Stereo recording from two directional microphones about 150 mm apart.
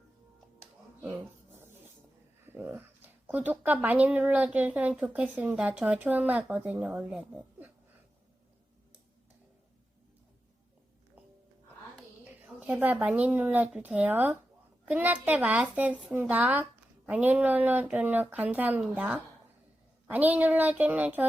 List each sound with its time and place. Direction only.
2.5 s speech: 15° right (ahead or behind)
12.2 s speech: 10° right (ahead or behind)